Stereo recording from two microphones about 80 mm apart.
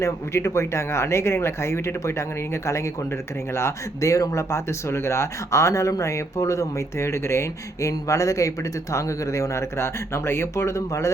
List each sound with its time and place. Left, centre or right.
0.0 s speech: left